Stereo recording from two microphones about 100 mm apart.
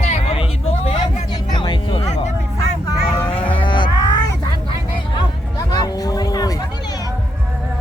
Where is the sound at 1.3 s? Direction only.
50° left (ahead or behind).